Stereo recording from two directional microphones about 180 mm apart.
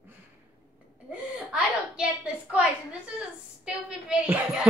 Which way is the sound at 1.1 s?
5° right (ahead or behind).